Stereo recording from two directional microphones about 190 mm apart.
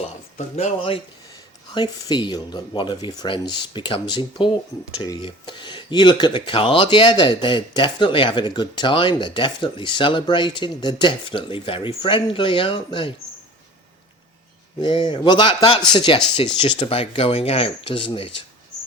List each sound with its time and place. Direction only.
0.3 s speech: 35° left (ahead or behind)
14.8 s speech: 25° left (ahead or behind)